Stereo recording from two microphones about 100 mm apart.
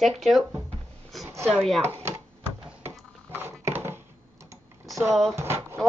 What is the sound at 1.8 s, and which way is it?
Speech, 25° right (ahead or behind).